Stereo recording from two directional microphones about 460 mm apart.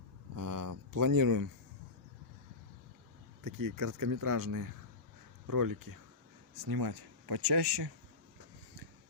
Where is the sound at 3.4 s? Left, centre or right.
Right.